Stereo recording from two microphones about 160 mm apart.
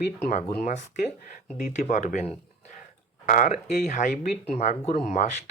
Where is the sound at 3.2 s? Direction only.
55° left (ahead or behind).